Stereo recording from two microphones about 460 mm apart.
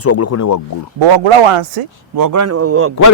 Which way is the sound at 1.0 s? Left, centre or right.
Right.